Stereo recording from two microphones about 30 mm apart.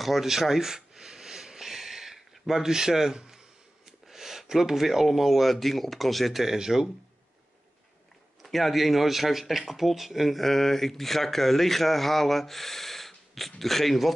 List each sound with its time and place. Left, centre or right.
0.0 s a sound: centre
2.7 s speech: centre
6.4 s speech: centre
8.4 s speech: centre
10.4 s speech: centre